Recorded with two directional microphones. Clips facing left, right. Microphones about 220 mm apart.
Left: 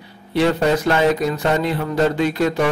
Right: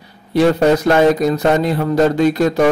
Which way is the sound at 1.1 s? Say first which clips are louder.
Right 5 dB; 40° right (ahead or behind).